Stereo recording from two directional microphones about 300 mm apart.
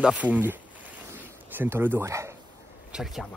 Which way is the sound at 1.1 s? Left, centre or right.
Centre.